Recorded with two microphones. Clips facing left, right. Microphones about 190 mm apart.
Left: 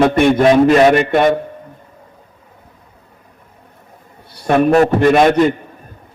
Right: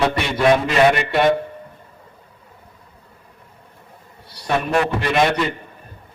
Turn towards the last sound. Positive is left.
turn(degrees=50)  # may be behind; listen again after turning